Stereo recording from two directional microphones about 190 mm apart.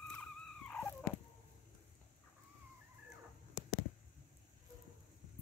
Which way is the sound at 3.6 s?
5° right (ahead or behind).